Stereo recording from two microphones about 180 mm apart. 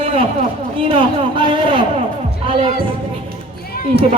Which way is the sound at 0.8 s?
30° right (ahead or behind).